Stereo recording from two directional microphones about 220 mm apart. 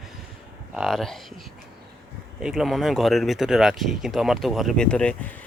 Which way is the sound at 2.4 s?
Centre (ahead or behind).